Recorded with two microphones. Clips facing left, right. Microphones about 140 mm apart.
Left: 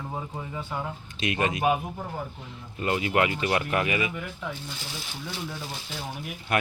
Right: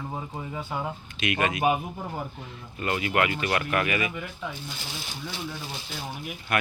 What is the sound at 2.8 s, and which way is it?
Speech, 25° left (ahead or behind).